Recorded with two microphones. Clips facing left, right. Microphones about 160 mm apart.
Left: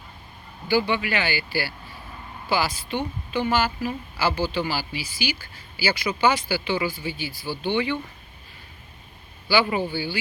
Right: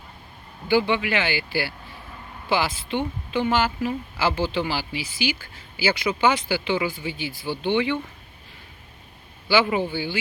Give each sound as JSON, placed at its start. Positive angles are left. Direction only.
{"t": 0.7, "sound": "a woman's voice", "side_deg": -20}
{"t": 9.6, "sound": "a woman's voice", "side_deg": -15}